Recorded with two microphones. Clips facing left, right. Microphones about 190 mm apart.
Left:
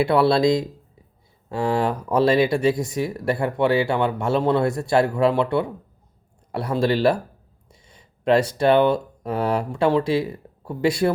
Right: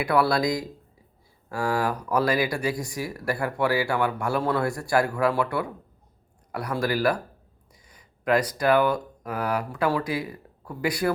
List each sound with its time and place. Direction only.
0.0 s speech: 25° left (ahead or behind)